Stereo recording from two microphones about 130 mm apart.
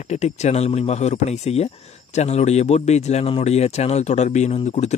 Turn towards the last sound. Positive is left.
turn(degrees=60)  # may be behind; listen again after turning